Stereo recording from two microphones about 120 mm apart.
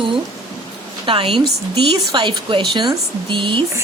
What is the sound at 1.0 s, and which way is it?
A woman's voice, 45° right (ahead or behind).